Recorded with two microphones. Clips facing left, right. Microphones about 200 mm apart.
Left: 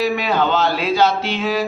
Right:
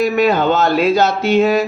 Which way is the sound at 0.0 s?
50° right (ahead or behind).